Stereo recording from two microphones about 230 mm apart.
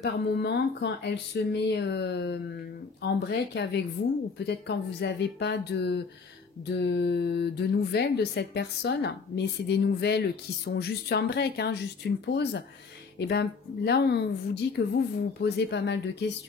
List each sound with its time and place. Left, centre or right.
0.0 s speech: left